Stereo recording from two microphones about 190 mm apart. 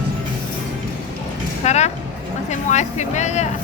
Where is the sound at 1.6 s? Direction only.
35° left (ahead or behind).